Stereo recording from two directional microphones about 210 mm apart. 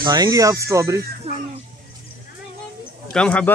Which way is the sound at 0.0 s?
20° right (ahead or behind).